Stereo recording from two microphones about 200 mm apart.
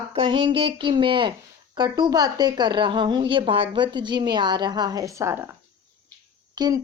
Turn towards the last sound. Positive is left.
turn(degrees=-20)  # may be behind; listen again after turning